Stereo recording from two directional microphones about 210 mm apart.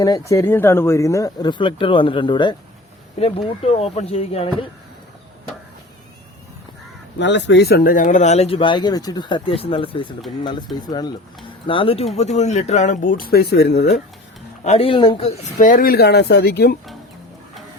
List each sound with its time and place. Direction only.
0.0 s speech: 15° left (ahead or behind)
7.2 s speech: 55° left (ahead or behind)
14.6 s speech: 30° left (ahead or behind); by 16.7 s 50° left (ahead or behind)